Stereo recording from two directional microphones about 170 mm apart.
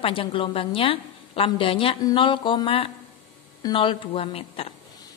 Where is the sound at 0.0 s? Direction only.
30° left (ahead or behind).